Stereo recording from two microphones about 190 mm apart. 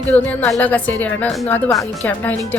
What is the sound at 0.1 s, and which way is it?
Speech, 10° left (ahead or behind).